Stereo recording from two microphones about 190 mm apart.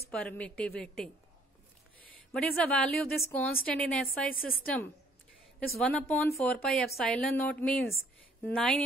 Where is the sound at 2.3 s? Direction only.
5° left (ahead or behind).